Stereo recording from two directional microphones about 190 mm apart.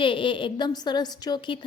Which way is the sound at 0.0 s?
25° left (ahead or behind).